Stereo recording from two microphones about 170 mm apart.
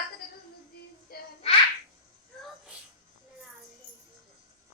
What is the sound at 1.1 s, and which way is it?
Babbling, 65° left (ahead or behind).